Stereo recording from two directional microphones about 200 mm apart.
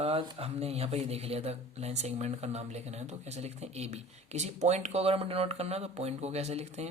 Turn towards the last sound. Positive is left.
turn(degrees=-35)  # may be behind; listen again after turning